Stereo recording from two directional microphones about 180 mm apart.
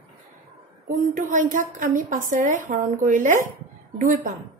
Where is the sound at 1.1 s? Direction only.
45° right (ahead or behind).